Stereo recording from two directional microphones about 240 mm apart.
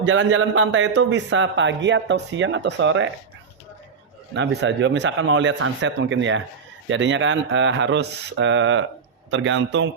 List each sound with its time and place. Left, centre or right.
0.0 s a man's voice: right
4.4 s a man's voice: right